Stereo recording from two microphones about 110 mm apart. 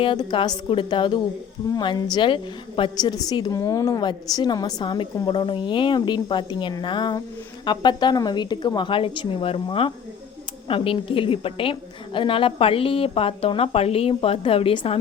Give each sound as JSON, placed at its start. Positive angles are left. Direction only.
{"t": 0.0, "sound": "a woman's voice", "side_deg": 50}